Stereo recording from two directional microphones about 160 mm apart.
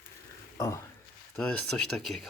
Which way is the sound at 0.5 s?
20° left (ahead or behind).